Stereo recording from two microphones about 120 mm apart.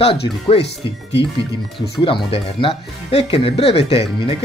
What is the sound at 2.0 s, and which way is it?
Speech, 45° left (ahead or behind).